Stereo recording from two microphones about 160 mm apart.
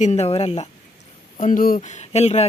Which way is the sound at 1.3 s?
55° left (ahead or behind).